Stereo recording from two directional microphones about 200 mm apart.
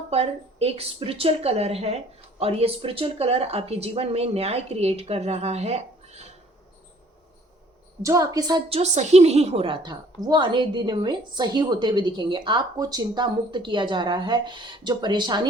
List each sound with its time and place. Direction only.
0.1 s a woman's voice: 30° right (ahead or behind)
8.0 s a woman's voice: 15° right (ahead or behind)
8.8 s a woman's voice: 35° right (ahead or behind)